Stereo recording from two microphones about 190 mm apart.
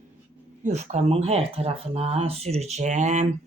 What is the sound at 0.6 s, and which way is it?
Speech, 40° right (ahead or behind).